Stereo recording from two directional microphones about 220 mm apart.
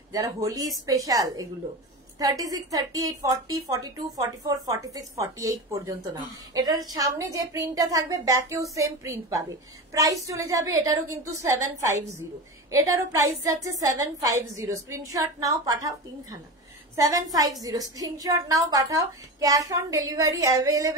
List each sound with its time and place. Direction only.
0.1 s a woman's voice: 15° right (ahead or behind)